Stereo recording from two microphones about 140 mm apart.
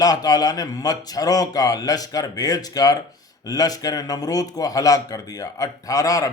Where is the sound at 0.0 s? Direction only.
25° left (ahead or behind).